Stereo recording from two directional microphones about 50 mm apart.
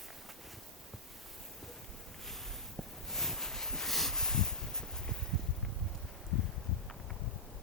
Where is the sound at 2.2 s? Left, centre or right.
Centre.